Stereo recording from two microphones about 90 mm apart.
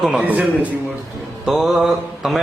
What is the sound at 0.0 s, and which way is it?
Speech, 5° right (ahead or behind).